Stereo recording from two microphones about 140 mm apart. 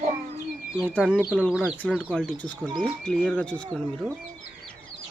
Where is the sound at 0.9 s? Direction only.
10° left (ahead or behind).